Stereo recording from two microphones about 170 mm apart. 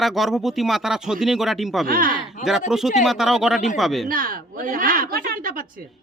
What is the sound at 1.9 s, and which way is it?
Speech, 55° right (ahead or behind).